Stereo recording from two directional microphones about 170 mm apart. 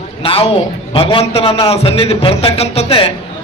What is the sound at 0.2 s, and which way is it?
A man's voice, 35° left (ahead or behind).